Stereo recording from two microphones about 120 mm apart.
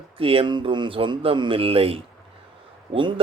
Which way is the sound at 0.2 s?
50° right (ahead or behind).